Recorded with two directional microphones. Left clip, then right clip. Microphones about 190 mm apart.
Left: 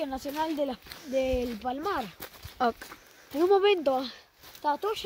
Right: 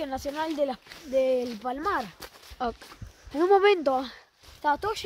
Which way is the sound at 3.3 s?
25° right (ahead or behind).